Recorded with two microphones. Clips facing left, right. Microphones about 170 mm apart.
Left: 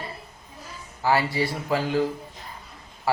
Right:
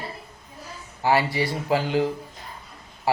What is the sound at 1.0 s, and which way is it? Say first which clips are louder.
A man's voice: right 1 dB; 20° right (ahead or behind).